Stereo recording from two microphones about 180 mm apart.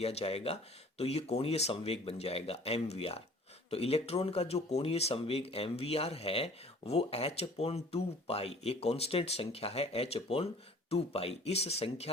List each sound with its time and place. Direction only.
0.0 s speech: 35° left (ahead or behind)